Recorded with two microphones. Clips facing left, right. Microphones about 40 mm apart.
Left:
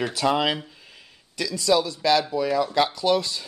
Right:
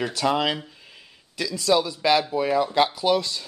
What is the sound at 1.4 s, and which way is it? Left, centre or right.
Speech, centre.